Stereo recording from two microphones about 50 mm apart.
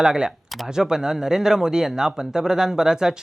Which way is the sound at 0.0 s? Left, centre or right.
Centre.